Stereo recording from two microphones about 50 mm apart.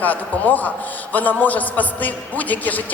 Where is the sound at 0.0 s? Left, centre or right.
Left.